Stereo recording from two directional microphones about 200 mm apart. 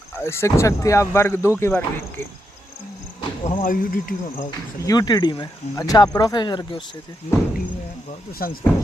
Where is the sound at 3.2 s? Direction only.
40° left (ahead or behind).